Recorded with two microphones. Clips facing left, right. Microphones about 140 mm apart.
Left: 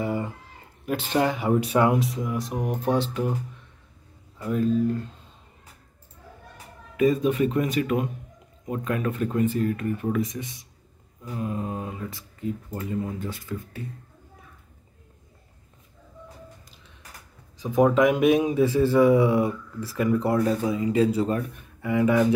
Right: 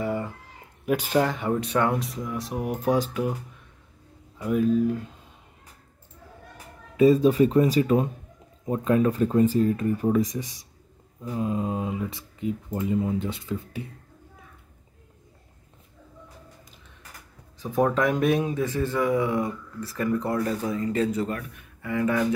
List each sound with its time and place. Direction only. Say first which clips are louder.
0.0 s a sound: even; 5° left (ahead or behind)
0.8 s speech: right 2 dB; 10° right (ahead or behind)
1.2 s speech: left 3 dB; 5° left (ahead or behind)
4.4 s speech: right 1 dB; 10° right (ahead or behind)
7.0 s speech: right 4 dB; 30° right (ahead or behind)
11.2 s speech: right 3 dB; 20° right (ahead or behind)
17.9 s a man's voice: left 4 dB; 20° left (ahead or behind)
18.9 s speech: left 5 dB; 15° left (ahead or behind)